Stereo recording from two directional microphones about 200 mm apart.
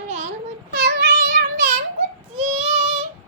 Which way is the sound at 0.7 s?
55° right (ahead or behind).